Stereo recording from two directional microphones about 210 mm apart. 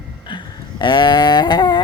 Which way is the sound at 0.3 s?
20° left (ahead or behind).